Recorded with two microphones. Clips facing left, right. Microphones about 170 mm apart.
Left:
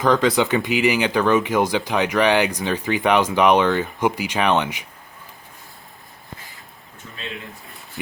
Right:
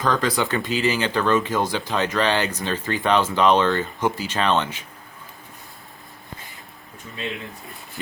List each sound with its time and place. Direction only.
0.0 s speech: 20° left (ahead or behind)